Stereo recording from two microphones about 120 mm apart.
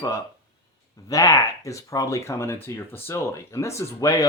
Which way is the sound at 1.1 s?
30° left (ahead or behind).